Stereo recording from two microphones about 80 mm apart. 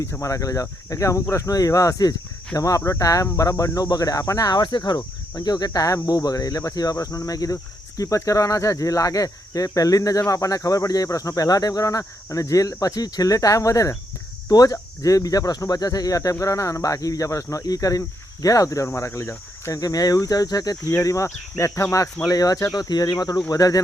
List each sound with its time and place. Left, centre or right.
0.0 s speech: left
5.5 s speech: left
19.8 s speech: left
22.3 s speech: left